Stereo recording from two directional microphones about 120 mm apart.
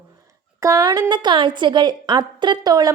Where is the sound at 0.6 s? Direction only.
30° right (ahead or behind).